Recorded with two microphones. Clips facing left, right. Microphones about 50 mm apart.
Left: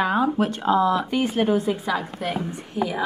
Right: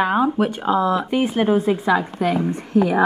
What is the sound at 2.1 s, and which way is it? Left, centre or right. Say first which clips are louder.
Speech: right 7 dB; right.